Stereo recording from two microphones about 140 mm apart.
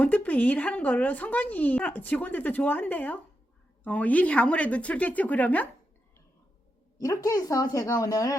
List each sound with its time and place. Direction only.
0.0 s speech: 10° left (ahead or behind)
7.0 s speech: 25° left (ahead or behind)